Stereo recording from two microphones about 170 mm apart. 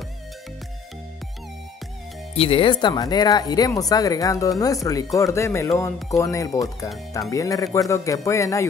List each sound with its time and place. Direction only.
2.3 s speech: 30° left (ahead or behind)